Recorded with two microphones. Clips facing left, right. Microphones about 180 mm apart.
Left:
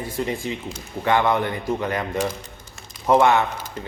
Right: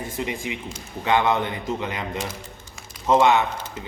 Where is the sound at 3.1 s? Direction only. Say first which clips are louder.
Left 1 dB; 15° right (ahead or behind).